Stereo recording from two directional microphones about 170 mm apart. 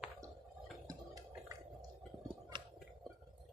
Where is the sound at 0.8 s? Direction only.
20° right (ahead or behind).